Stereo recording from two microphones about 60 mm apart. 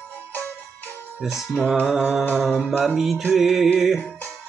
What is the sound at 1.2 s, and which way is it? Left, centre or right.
Music, centre.